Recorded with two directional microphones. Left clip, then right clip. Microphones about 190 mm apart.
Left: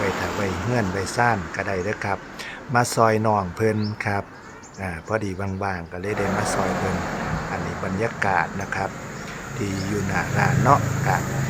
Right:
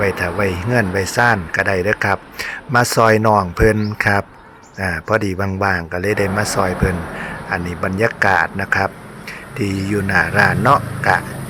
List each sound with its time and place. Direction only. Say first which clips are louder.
0.0 s speech: right 7 dB; 20° right (ahead or behind)